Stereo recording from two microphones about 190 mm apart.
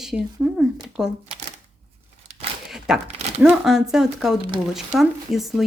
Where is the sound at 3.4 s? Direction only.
Centre (ahead or behind).